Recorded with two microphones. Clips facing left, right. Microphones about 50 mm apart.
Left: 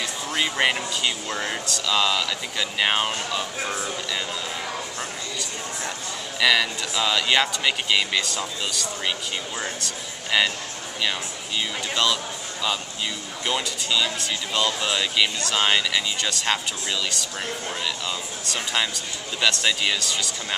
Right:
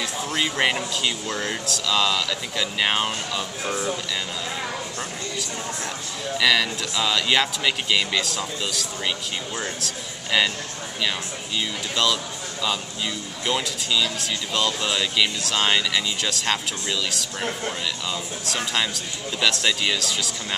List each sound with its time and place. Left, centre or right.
0.0 s speech: centre
6.4 s speech: centre
11.9 s speech: centre
13.5 s speech: centre